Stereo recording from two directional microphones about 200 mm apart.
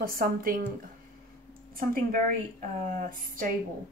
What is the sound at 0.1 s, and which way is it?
Speech, 45° right (ahead or behind).